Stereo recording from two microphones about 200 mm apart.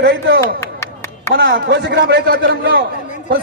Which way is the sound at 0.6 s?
15° left (ahead or behind).